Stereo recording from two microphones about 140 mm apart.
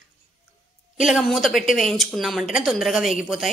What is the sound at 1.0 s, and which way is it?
A woman's voice, centre (ahead or behind).